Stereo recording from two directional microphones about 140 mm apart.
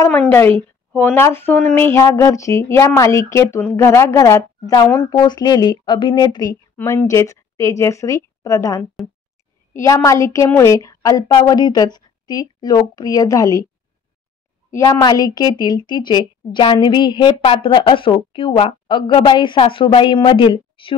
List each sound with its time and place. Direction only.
0.1 s speech: 15° left (ahead or behind)
14.7 s a woman's voice: 25° left (ahead or behind)